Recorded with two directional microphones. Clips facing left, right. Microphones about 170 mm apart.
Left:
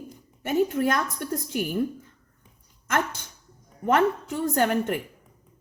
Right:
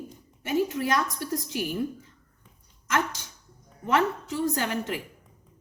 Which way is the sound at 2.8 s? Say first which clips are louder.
Left 1 dB; 55° left (ahead or behind).